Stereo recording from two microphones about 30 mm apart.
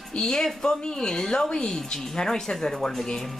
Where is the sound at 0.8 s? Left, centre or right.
Left.